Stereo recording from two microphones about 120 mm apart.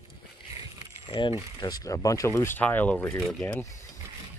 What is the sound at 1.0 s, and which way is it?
Speech, 45° left (ahead or behind).